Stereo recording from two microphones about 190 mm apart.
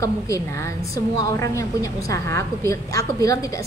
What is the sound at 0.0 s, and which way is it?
A woman's voice, 15° left (ahead or behind).